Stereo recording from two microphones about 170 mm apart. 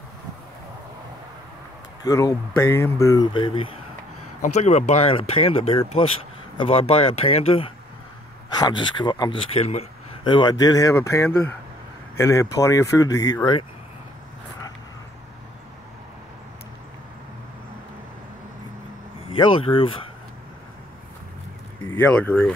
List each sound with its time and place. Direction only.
2.0 s speech: 20° left (ahead or behind)
3.3 s a man's voice: 25° left (ahead or behind)
4.4 s a man's voice: 40° left (ahead or behind); by 13.7 s 25° left (ahead or behind)
19.2 s speech: 30° left (ahead or behind)
21.8 s speech: 10° left (ahead or behind)